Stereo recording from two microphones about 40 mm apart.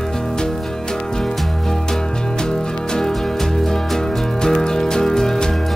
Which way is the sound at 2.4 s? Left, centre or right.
Centre.